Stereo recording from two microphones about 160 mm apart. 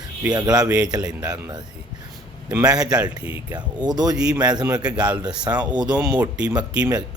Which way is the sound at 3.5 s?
25° right (ahead or behind).